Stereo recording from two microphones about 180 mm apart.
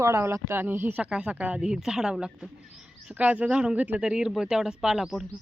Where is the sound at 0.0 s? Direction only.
15° right (ahead or behind).